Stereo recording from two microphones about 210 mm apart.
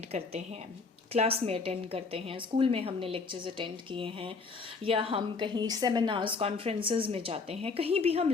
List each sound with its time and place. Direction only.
1.1 s a woman's voice: 30° right (ahead or behind)